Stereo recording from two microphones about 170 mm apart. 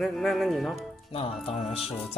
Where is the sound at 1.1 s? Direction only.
35° left (ahead or behind).